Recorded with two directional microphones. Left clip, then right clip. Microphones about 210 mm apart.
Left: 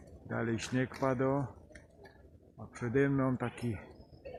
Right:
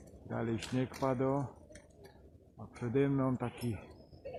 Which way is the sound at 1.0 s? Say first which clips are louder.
Left 1 dB; 15° left (ahead or behind).